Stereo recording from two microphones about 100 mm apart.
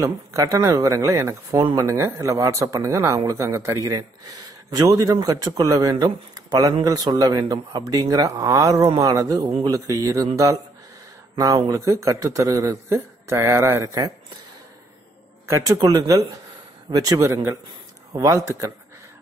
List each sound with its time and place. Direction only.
0.0 s speech: 35° right (ahead or behind)
4.6 s speech: 40° right (ahead or behind)
15.4 s speech: 30° right (ahead or behind)